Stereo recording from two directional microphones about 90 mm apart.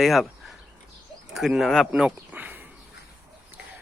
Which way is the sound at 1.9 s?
15° right (ahead or behind).